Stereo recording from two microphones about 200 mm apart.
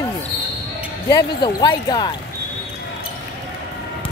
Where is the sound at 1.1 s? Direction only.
20° left (ahead or behind).